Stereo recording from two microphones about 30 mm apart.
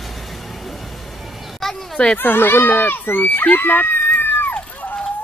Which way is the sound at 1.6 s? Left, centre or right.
Centre.